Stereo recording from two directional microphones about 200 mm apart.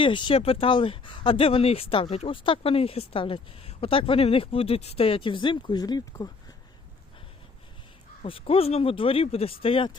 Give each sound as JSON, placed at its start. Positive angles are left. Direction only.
{"t": 0.0, "sound": "speech", "side_deg": 25}
{"t": 8.2, "sound": "speech", "side_deg": 30}